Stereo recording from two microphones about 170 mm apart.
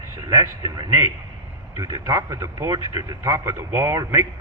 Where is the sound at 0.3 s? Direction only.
20° right (ahead or behind).